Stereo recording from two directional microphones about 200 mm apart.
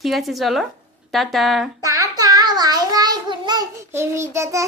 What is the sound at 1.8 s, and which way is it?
A child's voice, 15° right (ahead or behind).